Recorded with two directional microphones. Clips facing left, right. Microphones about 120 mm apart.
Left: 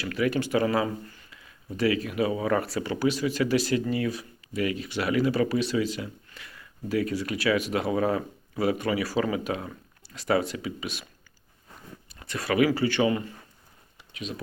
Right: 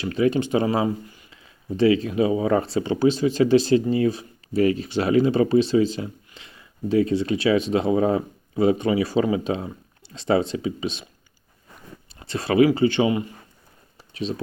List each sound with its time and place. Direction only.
0.0 s speech: 25° right (ahead or behind)
12.2 s speech: 25° right (ahead or behind)
14.1 s speech: 30° right (ahead or behind)